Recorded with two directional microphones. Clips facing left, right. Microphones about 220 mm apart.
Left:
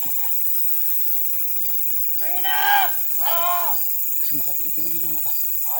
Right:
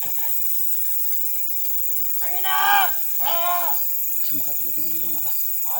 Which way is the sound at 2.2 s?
20° left (ahead or behind).